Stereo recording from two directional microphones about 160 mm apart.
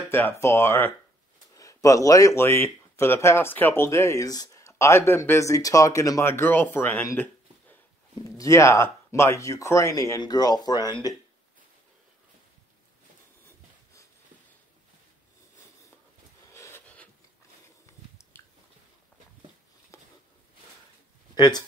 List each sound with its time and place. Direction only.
0.1 s speech: 15° left (ahead or behind)
8.4 s speech: 20° left (ahead or behind)
16.5 s a sound: 15° left (ahead or behind)
21.4 s speech: 25° left (ahead or behind)